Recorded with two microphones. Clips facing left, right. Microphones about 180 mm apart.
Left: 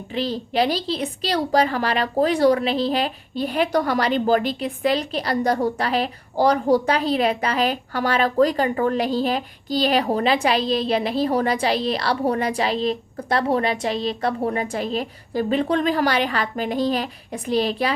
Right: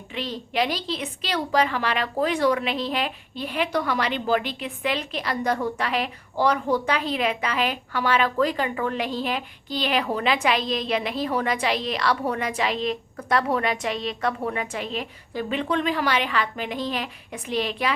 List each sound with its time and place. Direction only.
0.1 s a woman's voice: 35° left (ahead or behind)